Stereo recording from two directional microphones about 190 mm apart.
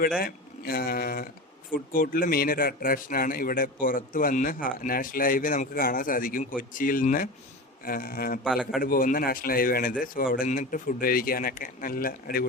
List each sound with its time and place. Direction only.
0.2 s a man's voice: 50° left (ahead or behind)
8.4 s a man's voice: centre (ahead or behind)
8.8 s a man's voice: 50° left (ahead or behind)